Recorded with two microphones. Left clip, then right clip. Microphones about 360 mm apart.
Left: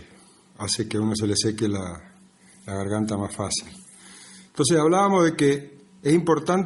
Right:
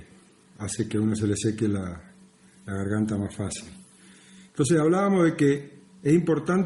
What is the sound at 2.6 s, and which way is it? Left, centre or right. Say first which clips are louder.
Speech: left 3 dB; left.